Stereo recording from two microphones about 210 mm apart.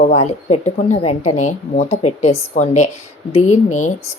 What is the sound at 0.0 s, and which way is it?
A woman's voice, 35° left (ahead or behind).